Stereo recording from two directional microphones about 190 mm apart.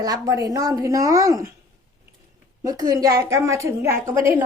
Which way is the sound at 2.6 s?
20° right (ahead or behind).